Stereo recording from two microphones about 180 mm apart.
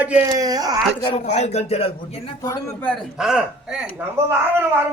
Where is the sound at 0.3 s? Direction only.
20° right (ahead or behind).